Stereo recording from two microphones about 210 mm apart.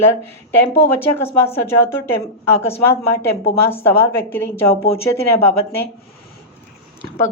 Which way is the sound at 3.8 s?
10° left (ahead or behind).